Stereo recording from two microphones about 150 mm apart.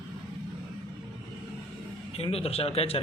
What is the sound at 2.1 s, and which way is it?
Speech, 40° left (ahead or behind).